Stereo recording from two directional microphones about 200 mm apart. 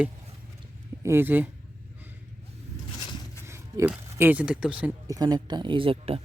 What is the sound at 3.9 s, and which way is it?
Speech, 10° right (ahead or behind).